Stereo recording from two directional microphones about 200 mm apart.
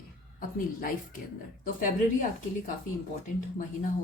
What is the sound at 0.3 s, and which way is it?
A woman's voice, 45° left (ahead or behind).